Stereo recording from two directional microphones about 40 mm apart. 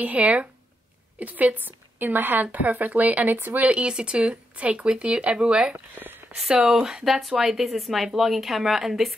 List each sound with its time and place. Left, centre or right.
0.0 s a woman's voice: right
3.7 s speech: right
6.0 s a woman's voice: right
6.5 s speech: right
7.1 s speech: centre